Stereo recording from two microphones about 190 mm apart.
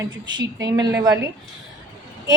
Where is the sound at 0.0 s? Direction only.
20° right (ahead or behind).